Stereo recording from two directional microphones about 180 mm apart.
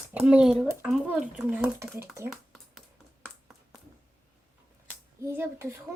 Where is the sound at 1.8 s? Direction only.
15° right (ahead or behind).